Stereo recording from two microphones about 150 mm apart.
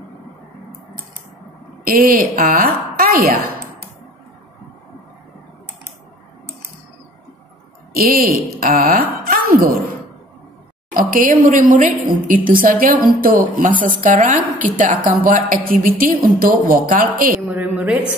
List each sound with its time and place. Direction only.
1.9 s a woman's voice: 75° right (ahead or behind)
7.9 s a woman's voice: 80° right
10.9 s a woman's voice: 65° right (ahead or behind)
17.5 s a sound: 10° right (ahead or behind)